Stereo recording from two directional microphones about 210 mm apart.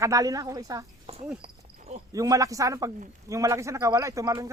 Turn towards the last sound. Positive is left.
turn(degrees=-15)  # may be behind; listen again after turning